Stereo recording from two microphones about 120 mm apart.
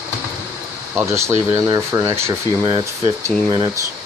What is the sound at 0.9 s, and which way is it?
Speech, 25° right (ahead or behind).